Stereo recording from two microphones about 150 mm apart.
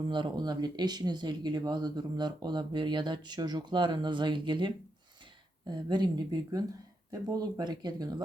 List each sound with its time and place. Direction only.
0.0 s speech: 30° right (ahead or behind)